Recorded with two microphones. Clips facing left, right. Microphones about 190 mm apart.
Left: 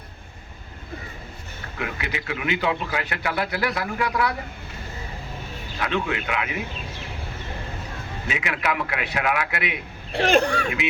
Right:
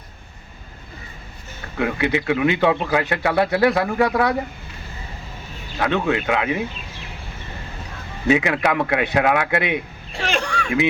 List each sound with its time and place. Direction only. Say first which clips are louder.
1.8 s a man's voice: right 10 dB; 25° right (ahead or behind)
5.8 s a man's voice: right 6 dB; 35° right (ahead or behind)
8.3 s a man's voice: right 9 dB; 35° right (ahead or behind)
10.1 s a child's voice: left 5 dB; 60° left (ahead or behind)
10.3 s speech: left 5 dB; 40° left (ahead or behind)